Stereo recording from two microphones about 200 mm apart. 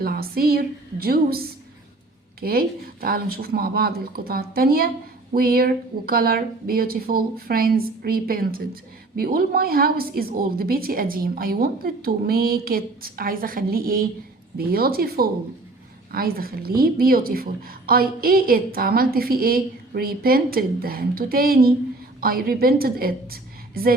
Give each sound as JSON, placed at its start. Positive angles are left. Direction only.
{"t": 0.0, "sound": "a woman's voice", "side_deg": -50}
{"t": 2.4, "sound": "a woman's voice", "side_deg": -50}